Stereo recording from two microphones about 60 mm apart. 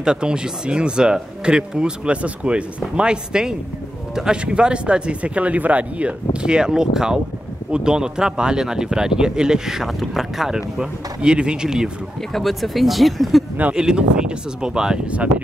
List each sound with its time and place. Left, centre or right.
0.0 s speech: centre
12.2 s speech: centre
13.7 s speech: centre